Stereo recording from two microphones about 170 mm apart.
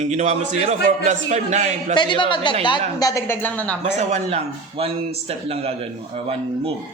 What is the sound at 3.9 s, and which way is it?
A man's voice, 40° right (ahead or behind).